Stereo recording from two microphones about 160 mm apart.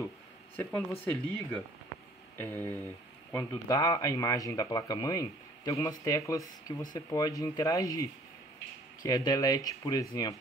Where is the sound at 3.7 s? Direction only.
20° left (ahead or behind).